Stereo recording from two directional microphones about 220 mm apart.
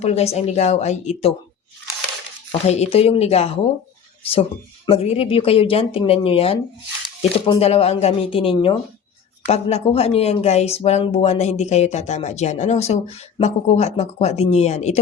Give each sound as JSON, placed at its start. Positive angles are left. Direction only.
{"t": 0.0, "sound": "speech", "side_deg": 30}
{"t": 2.5, "sound": "speech", "side_deg": 30}